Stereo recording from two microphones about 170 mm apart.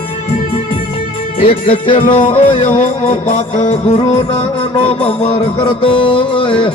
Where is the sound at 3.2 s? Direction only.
45° left (ahead or behind).